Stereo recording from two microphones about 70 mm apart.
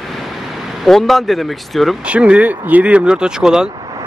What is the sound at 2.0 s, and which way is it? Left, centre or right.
Speech, centre.